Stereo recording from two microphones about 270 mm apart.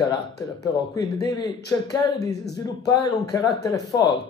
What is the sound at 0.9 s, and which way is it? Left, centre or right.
Speech, centre.